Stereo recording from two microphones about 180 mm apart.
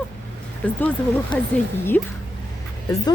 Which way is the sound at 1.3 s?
25° left (ahead or behind).